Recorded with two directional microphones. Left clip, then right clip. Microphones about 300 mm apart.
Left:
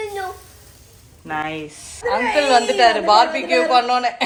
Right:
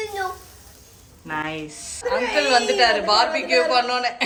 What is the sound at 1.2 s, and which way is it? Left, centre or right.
Speech, centre.